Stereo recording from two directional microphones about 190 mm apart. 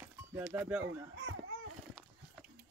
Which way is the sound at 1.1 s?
70° right (ahead or behind).